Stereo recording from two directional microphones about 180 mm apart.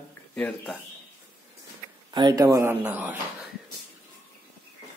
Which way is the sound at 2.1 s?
25° right (ahead or behind).